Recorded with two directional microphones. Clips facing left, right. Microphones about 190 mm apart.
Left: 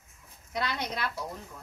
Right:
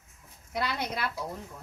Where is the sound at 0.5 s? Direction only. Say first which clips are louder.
Right 1 dB; 10° right (ahead or behind).